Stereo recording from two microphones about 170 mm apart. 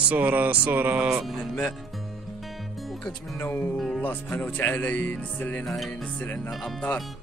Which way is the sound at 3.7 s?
Centre (ahead or behind).